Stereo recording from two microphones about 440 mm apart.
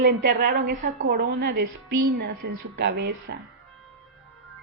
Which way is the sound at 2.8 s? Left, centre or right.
Right.